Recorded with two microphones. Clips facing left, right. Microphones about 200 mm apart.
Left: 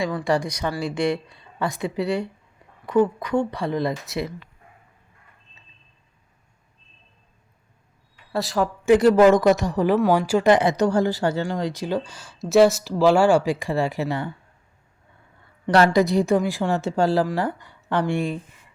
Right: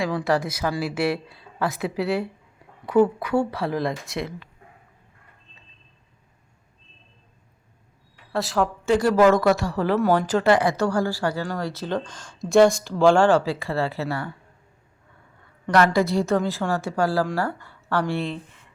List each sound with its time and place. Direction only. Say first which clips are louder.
0.3 s speech: even; 5° right (ahead or behind)
8.3 s speech: even; centre (ahead or behind)
8.8 s speech: left 4 dB; 20° left (ahead or behind)
15.6 s speech: left 2 dB; 25° left (ahead or behind)